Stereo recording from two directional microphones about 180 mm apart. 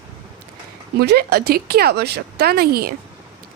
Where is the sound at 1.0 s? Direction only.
60° right (ahead or behind).